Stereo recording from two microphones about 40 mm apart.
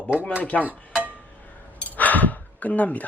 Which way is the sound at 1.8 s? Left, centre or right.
Left.